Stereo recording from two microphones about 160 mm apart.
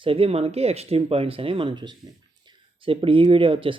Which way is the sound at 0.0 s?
35° right (ahead or behind).